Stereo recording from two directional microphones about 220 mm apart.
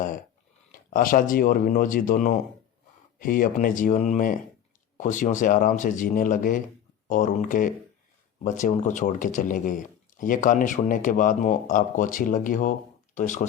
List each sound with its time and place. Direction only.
0.7 s speech: 40° left (ahead or behind)